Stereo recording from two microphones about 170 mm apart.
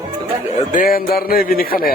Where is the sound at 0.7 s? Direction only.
55° left (ahead or behind).